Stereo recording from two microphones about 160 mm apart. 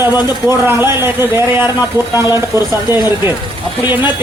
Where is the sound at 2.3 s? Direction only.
25° left (ahead or behind).